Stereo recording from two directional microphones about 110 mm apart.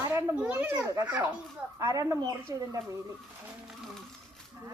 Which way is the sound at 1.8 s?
30° right (ahead or behind).